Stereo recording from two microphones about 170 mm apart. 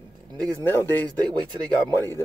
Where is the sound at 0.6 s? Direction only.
10° left (ahead or behind).